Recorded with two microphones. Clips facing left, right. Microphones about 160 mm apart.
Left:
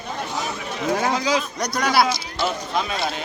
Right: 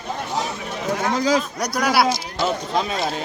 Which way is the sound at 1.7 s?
5° right (ahead or behind).